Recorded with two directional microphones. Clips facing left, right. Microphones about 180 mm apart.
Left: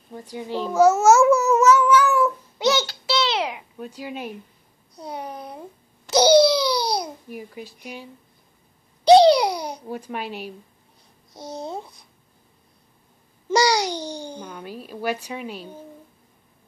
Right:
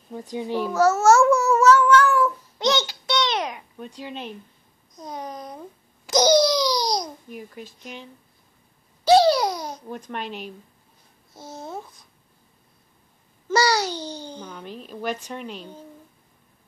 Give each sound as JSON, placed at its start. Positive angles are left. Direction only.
{"t": 0.1, "sound": "a child's voice", "side_deg": -15}
{"t": 0.7, "sound": "speech", "side_deg": 10}
{"t": 3.1, "sound": "babbling", "side_deg": 5}
{"t": 4.9, "sound": "a child's voice", "side_deg": 10}
{"t": 13.5, "sound": "a child's voice", "side_deg": 15}